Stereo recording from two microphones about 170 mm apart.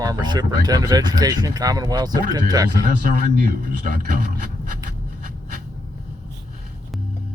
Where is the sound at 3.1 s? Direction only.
55° right (ahead or behind).